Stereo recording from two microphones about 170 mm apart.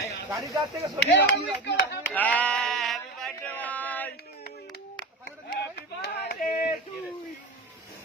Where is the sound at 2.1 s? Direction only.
10° left (ahead or behind).